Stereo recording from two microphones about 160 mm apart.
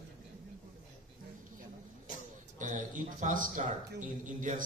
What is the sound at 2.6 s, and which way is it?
Speech, 55° right (ahead or behind).